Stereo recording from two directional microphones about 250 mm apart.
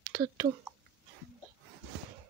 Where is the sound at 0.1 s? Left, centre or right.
Centre.